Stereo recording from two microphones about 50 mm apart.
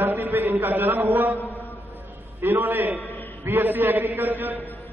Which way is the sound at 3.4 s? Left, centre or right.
Right.